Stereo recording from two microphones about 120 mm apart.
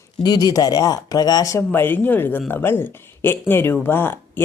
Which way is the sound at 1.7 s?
15° left (ahead or behind).